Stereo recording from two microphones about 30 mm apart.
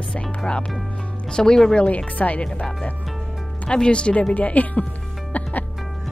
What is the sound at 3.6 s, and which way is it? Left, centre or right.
Speech, left.